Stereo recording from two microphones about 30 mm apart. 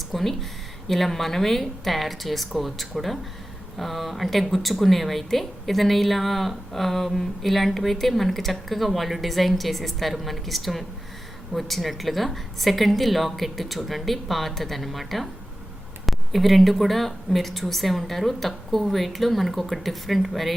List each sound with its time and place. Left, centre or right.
0.1 s speech: centre